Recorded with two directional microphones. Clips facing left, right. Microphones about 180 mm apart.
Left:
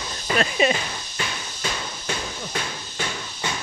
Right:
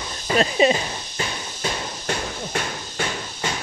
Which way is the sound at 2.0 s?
50° right (ahead or behind).